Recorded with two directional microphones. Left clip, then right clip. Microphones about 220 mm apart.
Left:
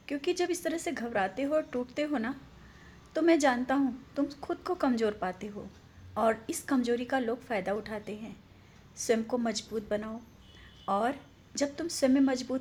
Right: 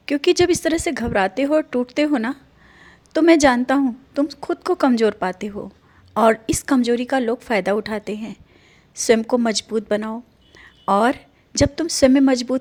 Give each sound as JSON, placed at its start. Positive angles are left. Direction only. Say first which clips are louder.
{"t": 0.0, "sound": "a woman's voice", "louder": "right 14 dB", "side_deg": -45}